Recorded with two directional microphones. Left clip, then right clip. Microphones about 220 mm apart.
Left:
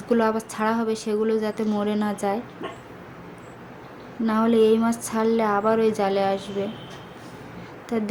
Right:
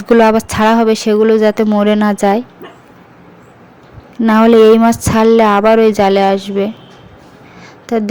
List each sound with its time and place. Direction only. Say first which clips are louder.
0.1 s speech: right 13 dB; 40° right (ahead or behind)
4.2 s speech: right 13 dB; 40° right (ahead or behind)
7.9 s speech: right 11 dB; 35° right (ahead or behind)